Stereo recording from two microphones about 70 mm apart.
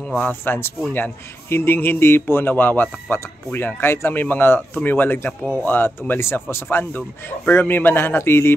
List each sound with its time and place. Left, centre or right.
0.2 s a man's voice: left